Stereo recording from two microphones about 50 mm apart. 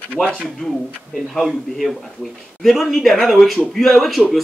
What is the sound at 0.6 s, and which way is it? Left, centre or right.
Speech, centre.